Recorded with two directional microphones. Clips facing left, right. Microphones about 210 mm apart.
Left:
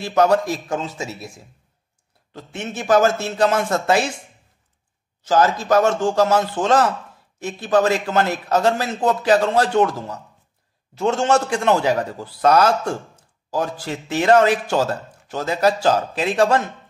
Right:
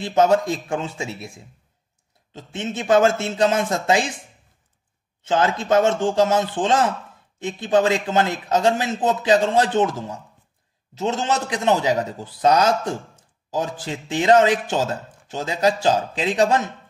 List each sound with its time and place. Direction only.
0.0 s a man's voice: 25° right (ahead or behind)
2.3 s a man's voice: 20° right (ahead or behind)
5.6 s a man's voice: 20° right (ahead or behind)
11.0 s a man's voice: 20° right (ahead or behind)